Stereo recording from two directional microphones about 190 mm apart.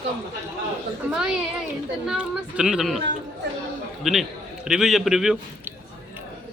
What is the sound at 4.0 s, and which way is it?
A man's voice, centre (ahead or behind).